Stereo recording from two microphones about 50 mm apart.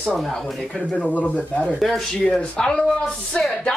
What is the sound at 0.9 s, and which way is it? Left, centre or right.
Speech, left.